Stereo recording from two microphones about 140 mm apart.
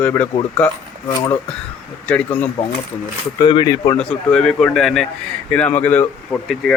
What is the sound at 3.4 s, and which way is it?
Speech, 35° left (ahead or behind).